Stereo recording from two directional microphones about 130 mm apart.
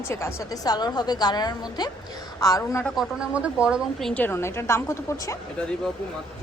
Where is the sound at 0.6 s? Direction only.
30° left (ahead or behind).